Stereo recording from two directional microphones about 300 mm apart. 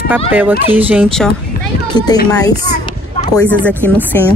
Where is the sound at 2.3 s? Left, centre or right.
Centre.